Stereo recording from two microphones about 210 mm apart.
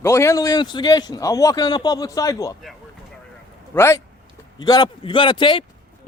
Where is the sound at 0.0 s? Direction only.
15° left (ahead or behind).